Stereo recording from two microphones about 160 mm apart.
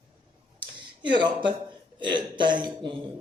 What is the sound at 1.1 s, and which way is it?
A man's voice, 30° right (ahead or behind).